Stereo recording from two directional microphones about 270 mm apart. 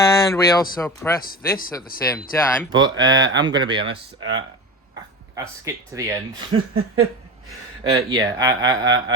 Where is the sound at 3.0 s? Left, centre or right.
Right.